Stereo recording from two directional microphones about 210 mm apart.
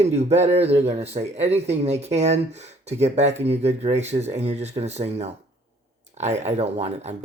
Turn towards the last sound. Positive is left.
turn(degrees=-30)  # may be behind; listen again after turning